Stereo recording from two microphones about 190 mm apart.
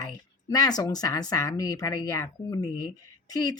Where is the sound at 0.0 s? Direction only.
20° left (ahead or behind).